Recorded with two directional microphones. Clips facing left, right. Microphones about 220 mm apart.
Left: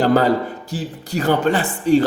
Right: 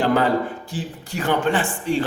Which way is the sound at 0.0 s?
40° left (ahead or behind).